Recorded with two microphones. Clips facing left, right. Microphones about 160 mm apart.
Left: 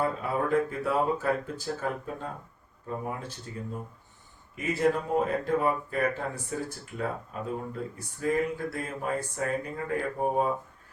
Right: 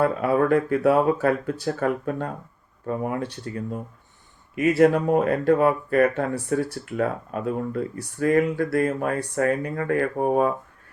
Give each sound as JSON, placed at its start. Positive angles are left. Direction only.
{"t": 0.0, "sound": "speech", "side_deg": -75}